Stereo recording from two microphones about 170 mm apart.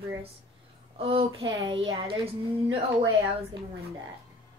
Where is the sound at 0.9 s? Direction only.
35° right (ahead or behind).